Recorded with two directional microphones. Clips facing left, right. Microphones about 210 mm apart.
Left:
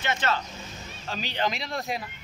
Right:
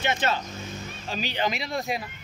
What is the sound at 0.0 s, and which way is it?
Speech, 15° right (ahead or behind).